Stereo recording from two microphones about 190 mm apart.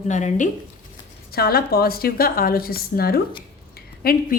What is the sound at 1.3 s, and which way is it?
A woman's voice, 55° left (ahead or behind).